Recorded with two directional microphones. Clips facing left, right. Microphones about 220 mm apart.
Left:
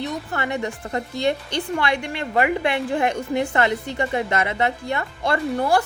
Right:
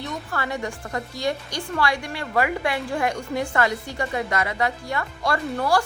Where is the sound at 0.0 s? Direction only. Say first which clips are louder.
Left 3 dB; 20° left (ahead or behind).